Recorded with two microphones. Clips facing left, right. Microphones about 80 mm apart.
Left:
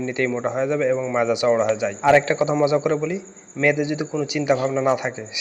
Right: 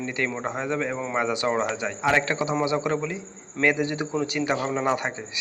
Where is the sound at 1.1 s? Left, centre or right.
Centre.